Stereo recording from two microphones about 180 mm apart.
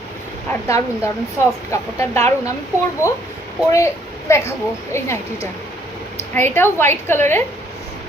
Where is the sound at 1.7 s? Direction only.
15° left (ahead or behind).